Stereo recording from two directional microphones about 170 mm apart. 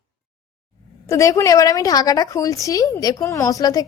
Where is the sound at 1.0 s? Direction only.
15° left (ahead or behind).